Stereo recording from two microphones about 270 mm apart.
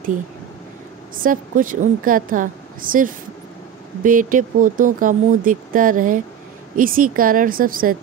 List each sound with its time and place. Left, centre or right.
1.1 s a woman's voice: right